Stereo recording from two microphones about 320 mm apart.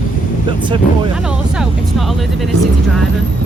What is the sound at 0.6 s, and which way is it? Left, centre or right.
Speech, centre.